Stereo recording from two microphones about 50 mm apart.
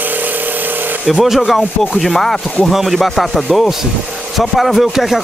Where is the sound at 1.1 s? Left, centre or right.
Centre.